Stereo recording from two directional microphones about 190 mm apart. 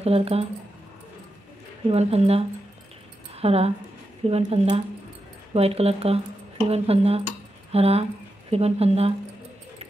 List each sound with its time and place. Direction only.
0.0 s speech: 30° right (ahead or behind)
1.9 s speech: 35° right (ahead or behind)